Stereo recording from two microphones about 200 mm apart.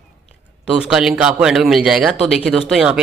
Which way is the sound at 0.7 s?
5° right (ahead or behind).